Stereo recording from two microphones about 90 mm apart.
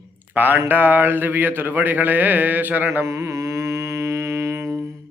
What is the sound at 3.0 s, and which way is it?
Music, 35° right (ahead or behind).